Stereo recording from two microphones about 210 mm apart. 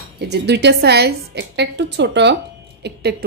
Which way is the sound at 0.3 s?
55° right (ahead or behind).